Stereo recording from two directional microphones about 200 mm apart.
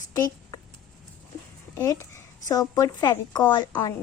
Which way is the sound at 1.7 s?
15° left (ahead or behind).